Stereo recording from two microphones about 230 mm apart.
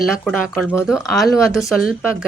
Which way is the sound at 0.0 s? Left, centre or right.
Centre.